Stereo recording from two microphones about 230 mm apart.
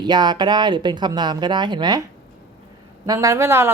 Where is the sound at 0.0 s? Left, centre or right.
Centre.